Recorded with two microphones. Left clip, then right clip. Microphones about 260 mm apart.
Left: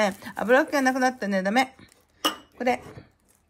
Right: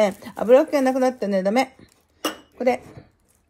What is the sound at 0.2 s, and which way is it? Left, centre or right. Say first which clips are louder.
Speech: right 6 dB; centre.